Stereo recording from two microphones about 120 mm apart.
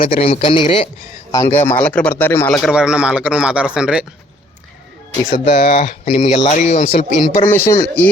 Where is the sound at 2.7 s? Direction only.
5° right (ahead or behind).